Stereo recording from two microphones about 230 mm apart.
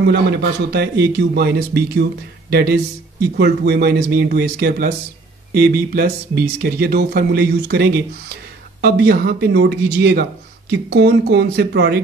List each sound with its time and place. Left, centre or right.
0.0 s speech: right